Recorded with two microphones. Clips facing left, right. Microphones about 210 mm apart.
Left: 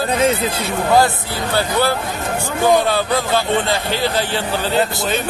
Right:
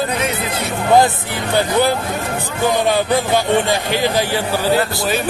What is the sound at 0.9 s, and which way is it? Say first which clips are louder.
A man's voice: right 3 dB; 20° right (ahead or behind).